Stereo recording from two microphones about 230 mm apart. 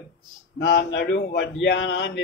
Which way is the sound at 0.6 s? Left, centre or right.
Left.